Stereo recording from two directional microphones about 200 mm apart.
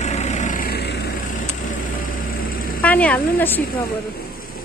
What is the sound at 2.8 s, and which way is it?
A woman's voice, 5° left (ahead or behind).